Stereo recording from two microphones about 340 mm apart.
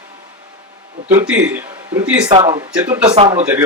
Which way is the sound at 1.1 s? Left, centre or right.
Centre.